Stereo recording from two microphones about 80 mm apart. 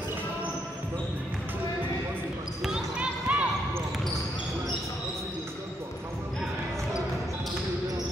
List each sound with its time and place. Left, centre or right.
2.6 s basketball bounce: centre